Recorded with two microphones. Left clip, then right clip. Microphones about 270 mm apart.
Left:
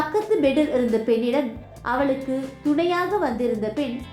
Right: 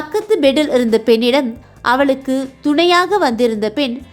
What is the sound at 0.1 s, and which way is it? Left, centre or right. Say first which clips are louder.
A woman's voice: right 11 dB; right.